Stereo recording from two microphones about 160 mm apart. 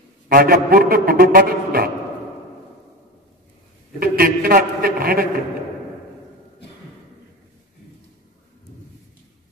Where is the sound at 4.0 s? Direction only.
70° right (ahead or behind).